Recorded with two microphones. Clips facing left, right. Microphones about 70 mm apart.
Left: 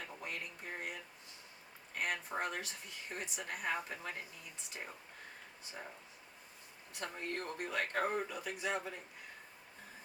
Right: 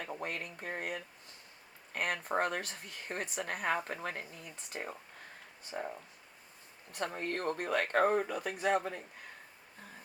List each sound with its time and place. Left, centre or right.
0.0 s speech: right
2.0 s speech: right
6.9 s speech: right